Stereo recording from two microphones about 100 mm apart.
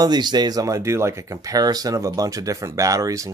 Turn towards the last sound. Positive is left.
turn(degrees=-35)  # may be behind; listen again after turning